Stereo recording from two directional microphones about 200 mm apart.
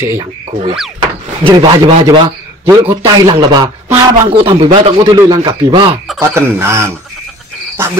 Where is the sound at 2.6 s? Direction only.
15° right (ahead or behind).